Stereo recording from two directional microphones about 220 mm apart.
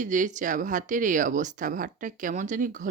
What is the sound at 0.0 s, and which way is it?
Speech, 35° right (ahead or behind).